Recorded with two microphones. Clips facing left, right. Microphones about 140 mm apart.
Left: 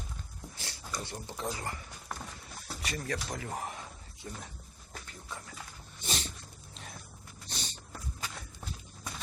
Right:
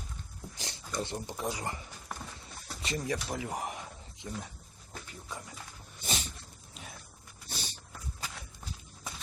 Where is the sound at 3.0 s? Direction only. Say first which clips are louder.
Right 2 dB; 10° right (ahead or behind).